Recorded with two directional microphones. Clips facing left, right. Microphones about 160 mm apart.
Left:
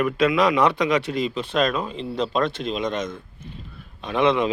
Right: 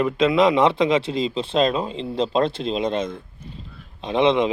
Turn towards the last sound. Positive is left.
turn(degrees=-25)  # may be behind; listen again after turning